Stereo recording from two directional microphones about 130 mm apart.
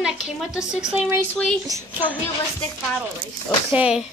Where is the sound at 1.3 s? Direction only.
5° left (ahead or behind).